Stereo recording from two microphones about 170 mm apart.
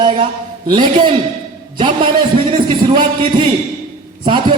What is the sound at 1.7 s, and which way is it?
A man's voice, 30° right (ahead or behind).